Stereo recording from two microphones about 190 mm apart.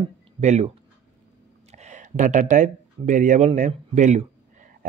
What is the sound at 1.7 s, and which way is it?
Speech, 40° right (ahead or behind).